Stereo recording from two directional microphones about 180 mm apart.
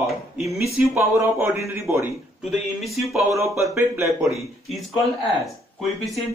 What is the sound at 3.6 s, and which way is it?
Speech, 15° right (ahead or behind).